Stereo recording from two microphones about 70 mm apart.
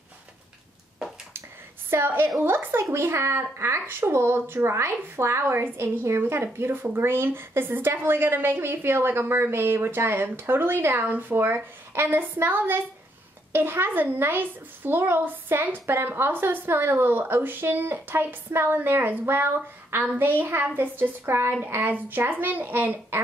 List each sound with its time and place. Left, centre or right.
1.9 s a child's voice: right